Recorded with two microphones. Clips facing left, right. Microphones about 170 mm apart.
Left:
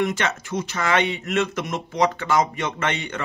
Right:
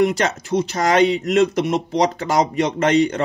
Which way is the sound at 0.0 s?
35° right (ahead or behind).